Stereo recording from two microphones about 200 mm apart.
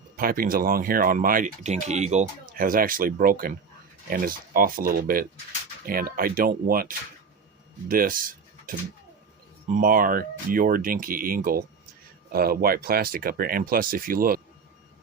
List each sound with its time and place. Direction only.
0.2 s speech: 45° right (ahead or behind)